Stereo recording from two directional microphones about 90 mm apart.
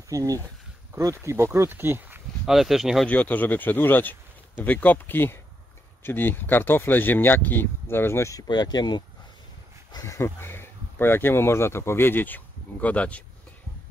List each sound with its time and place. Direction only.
0.1 s speech: 40° right (ahead or behind); by 2.2 s 20° right (ahead or behind)
2.4 s speech: 5° right (ahead or behind)
3.1 s speech: 15° left (ahead or behind)
8.4 s speech: 50° left (ahead or behind)
10.0 s speech: 30° left (ahead or behind); by 13.2 s 15° left (ahead or behind)